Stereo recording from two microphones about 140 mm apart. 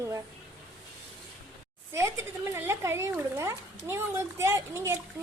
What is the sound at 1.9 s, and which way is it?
Speech, 20° right (ahead or behind).